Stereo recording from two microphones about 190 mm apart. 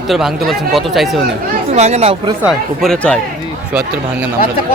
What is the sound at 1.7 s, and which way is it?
Speech, 35° right (ahead or behind).